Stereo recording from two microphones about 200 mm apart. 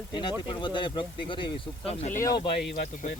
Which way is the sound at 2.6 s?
50° left (ahead or behind).